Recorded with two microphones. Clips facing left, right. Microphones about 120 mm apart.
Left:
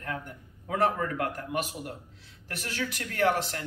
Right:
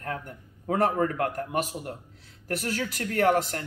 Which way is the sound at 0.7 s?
40° right (ahead or behind).